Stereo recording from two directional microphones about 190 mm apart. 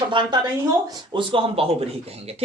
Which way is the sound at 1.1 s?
30° right (ahead or behind).